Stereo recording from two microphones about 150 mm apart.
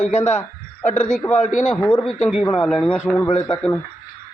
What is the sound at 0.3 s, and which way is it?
A man's voice, 10° left (ahead or behind).